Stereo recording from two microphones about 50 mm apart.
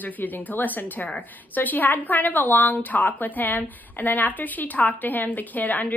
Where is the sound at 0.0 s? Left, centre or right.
Left.